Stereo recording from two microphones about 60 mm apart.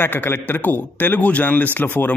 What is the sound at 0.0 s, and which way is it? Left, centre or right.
A man's voice, left.